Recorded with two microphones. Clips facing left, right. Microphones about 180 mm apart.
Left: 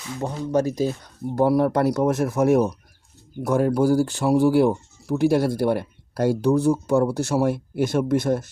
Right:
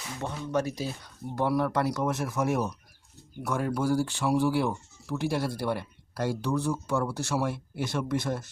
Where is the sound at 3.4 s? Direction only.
35° left (ahead or behind).